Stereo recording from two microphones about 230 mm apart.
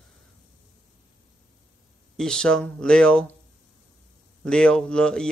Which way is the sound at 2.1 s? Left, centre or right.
Centre.